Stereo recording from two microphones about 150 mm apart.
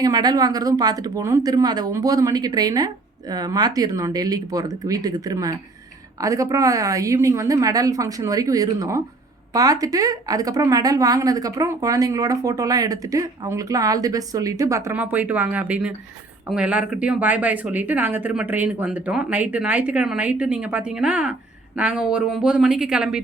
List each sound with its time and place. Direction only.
0.0 s a woman's voice: 25° right (ahead or behind); by 23.2 s 5° right (ahead or behind)